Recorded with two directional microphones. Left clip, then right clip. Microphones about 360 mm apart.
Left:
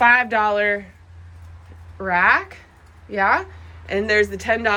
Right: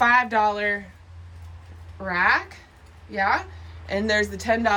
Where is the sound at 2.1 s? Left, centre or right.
Centre.